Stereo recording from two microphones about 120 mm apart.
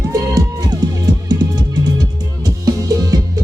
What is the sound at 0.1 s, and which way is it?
Music, 30° right (ahead or behind).